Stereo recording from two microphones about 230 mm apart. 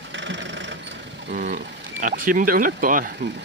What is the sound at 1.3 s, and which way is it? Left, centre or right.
Speech, right.